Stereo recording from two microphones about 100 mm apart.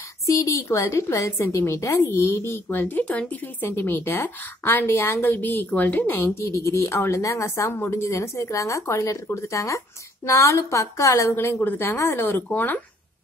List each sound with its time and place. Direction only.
0.3 s a woman's voice: 35° left (ahead or behind); by 12.8 s 15° left (ahead or behind)